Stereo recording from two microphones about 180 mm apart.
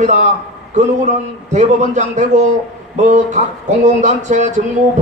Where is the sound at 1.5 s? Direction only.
40° right (ahead or behind).